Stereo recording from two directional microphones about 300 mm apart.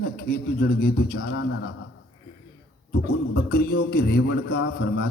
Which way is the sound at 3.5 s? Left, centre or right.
Left.